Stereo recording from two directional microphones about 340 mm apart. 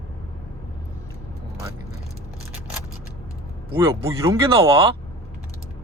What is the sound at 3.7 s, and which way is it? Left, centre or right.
Speech, centre.